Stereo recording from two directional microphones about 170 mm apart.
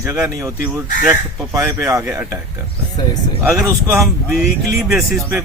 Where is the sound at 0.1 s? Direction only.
10° right (ahead or behind).